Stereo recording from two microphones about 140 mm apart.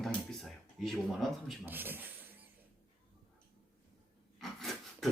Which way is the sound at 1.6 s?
15° right (ahead or behind).